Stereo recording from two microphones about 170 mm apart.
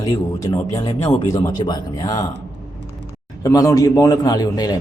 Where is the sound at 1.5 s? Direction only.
25° left (ahead or behind).